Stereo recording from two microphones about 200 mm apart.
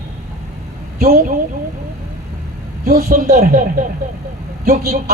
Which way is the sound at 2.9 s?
45° right (ahead or behind).